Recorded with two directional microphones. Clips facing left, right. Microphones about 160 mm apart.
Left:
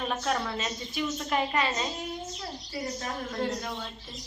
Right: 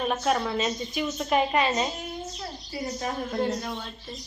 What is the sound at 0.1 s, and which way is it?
A woman's voice, 15° right (ahead or behind).